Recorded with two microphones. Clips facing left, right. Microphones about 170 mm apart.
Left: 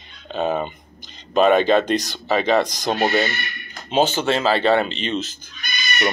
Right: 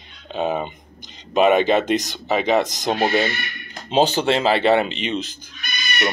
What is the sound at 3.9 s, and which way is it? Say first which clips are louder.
Speech: right 1 dB; 35° right (ahead or behind).